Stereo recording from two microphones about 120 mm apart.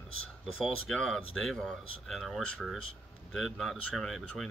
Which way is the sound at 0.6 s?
5° left (ahead or behind).